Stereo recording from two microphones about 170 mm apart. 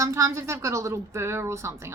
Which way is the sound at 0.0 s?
20° right (ahead or behind).